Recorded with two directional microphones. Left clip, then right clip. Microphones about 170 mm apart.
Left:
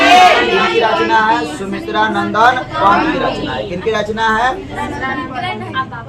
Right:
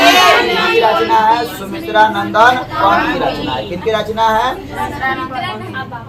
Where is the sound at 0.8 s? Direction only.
15° right (ahead or behind).